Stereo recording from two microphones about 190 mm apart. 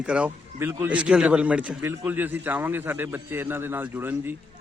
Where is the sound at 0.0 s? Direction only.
5° right (ahead or behind).